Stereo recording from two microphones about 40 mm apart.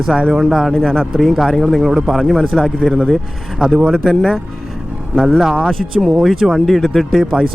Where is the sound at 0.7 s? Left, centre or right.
Centre.